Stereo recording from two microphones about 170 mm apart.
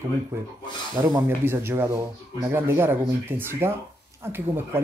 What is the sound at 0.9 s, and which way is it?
Speech, 15° right (ahead or behind).